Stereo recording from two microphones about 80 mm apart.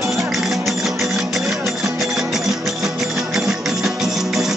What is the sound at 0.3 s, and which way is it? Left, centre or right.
Music, centre.